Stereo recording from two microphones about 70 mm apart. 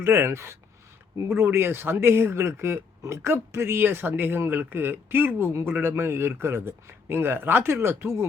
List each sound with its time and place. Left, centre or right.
0.0 s speech: right
3.2 s a woman's voice: right